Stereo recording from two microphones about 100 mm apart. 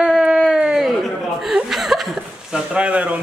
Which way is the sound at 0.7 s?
Centre (ahead or behind).